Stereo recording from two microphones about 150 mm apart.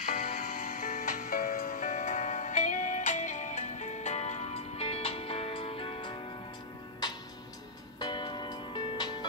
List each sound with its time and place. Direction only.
0.0 s music: 60° left (ahead or behind); by 6.1 s 35° left (ahead or behind)
8.0 s music: 30° left (ahead or behind)